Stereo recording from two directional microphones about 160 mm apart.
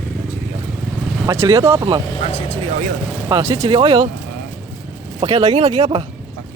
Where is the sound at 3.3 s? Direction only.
25° right (ahead or behind).